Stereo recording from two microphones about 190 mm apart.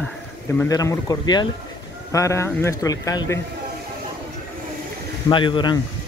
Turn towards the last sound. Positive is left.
turn(degrees=25)  # may be behind; listen again after turning